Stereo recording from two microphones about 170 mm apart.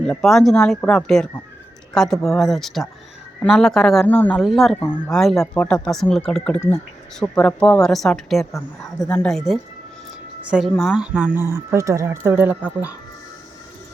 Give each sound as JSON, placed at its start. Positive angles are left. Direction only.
{"t": 0.0, "sound": "speech", "side_deg": 5}